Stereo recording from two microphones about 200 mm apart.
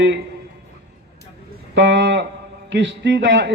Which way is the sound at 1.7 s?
60° right (ahead or behind).